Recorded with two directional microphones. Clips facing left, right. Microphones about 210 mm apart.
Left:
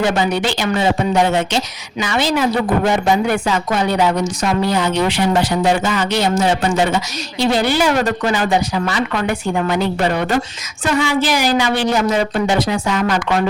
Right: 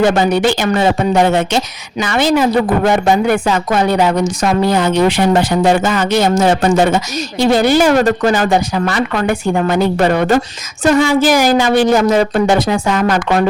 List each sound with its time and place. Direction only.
0.0 s speech: 45° right (ahead or behind)